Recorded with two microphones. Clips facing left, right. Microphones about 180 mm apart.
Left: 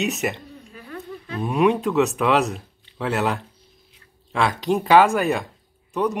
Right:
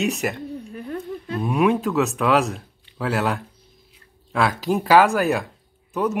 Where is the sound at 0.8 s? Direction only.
40° right (ahead or behind).